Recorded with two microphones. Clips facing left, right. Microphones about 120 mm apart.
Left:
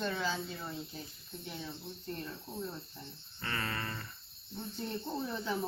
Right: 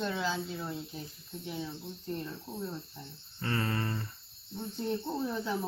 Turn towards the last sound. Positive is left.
turn(degrees=-5)  # may be behind; listen again after turning